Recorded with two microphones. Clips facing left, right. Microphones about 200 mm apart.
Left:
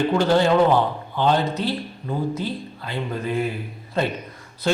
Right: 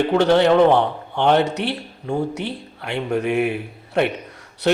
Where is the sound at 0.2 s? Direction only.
65° right (ahead or behind).